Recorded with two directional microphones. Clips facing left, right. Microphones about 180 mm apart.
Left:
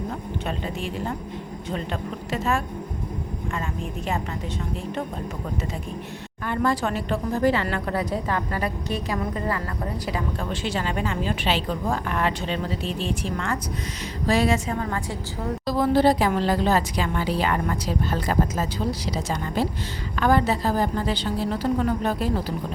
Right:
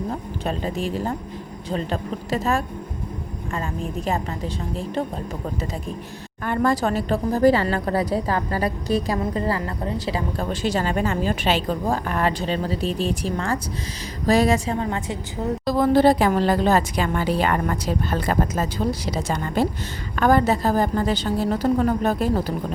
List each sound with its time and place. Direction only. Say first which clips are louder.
0.1 s a woman's voice: right 3 dB; 35° right (ahead or behind)
4.0 s a woman's voice: right 2 dB; 35° right (ahead or behind)
6.4 s a woman's voice: right 3 dB; 45° right (ahead or behind)
14.7 s a woman's voice: right 3 dB; 25° right (ahead or behind)
15.6 s a woman's voice: right 3 dB; 50° right (ahead or behind)